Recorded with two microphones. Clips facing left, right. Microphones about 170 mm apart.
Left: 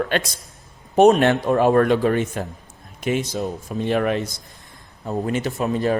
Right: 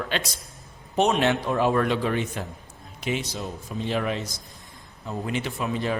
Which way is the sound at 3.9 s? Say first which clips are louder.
Left 7 dB; 55° left (ahead or behind).